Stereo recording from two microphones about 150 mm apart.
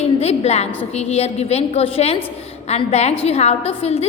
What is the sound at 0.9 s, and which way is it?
A woman's voice, 45° left (ahead or behind).